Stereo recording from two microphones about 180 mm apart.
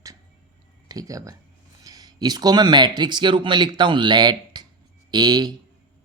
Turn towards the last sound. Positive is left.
turn(degrees=-25)  # may be behind; listen again after turning